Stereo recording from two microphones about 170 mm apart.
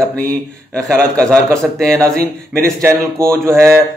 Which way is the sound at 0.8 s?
20° right (ahead or behind).